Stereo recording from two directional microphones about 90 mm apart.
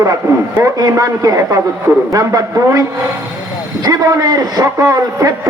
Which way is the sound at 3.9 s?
45° right (ahead or behind).